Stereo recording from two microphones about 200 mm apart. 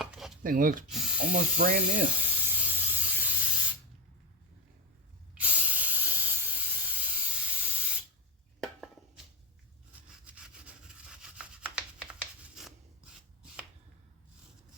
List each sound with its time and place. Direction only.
0.0 s chopping: centre (ahead or behind)
0.4 s speech: 45° right (ahead or behind)
0.9 s spray: 5° right (ahead or behind)
1.3 s speech: 50° right (ahead or behind)
2.3 s spray: 10° right (ahead or behind)
5.3 s steam: 5° right (ahead or behind)
9.9 s rub: 5° right (ahead or behind)
12.2 s a sound: 5° right (ahead or behind)